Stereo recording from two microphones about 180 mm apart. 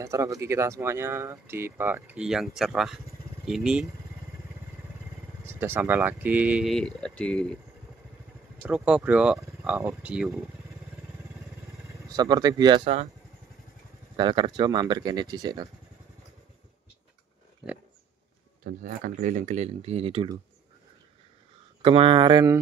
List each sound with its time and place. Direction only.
0.0 s speech: 15° right (ahead or behind)
5.4 s speech: 15° right (ahead or behind); by 7.5 s 5° left (ahead or behind)
8.6 s speech: 5° right (ahead or behind)
12.1 s speech: 20° right (ahead or behind)
14.1 s speech: 25° right (ahead or behind)
18.6 s speech: 55° right (ahead or behind); by 20.3 s 30° right (ahead or behind)
21.8 s speech: 30° right (ahead or behind)